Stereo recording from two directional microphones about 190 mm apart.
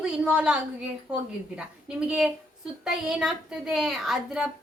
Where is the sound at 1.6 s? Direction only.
5° right (ahead or behind).